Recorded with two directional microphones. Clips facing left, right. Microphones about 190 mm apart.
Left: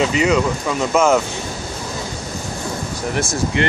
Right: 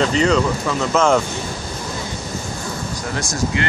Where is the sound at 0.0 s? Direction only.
10° left (ahead or behind).